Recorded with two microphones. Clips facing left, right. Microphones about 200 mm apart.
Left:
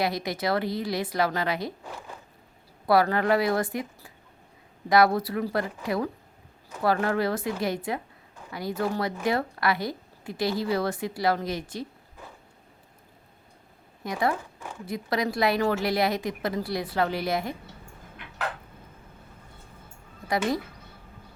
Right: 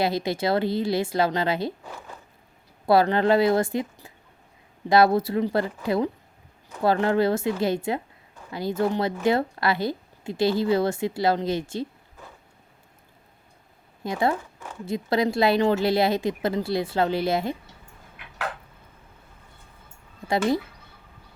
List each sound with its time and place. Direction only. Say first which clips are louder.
0.0 s a woman's voice: right 3 dB; 25° right (ahead or behind)
2.8 s a woman's voice: right 3 dB; 25° right (ahead or behind)
14.0 s a woman's voice: right 3 dB; 25° right (ahead or behind)